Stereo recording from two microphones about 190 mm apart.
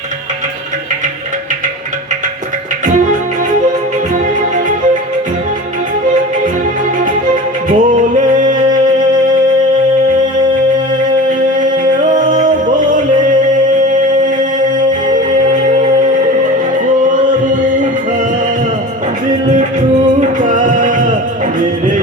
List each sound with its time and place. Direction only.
7.7 s music: 40° right (ahead or behind)
11.3 s music: 45° right (ahead or behind)
20.1 s music: 40° right (ahead or behind)